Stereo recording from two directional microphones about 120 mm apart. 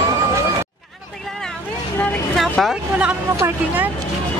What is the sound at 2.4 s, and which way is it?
Vehicle, centre (ahead or behind).